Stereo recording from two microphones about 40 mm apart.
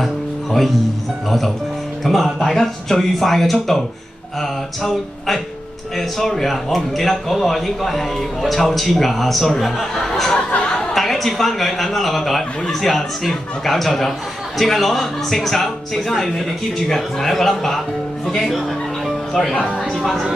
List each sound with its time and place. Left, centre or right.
0.0 s music: centre
2.0 s a man's voice: centre
4.4 s music: centre
5.9 s a man's voice: centre
10.5 s a sound: left
10.8 s a man's voice: centre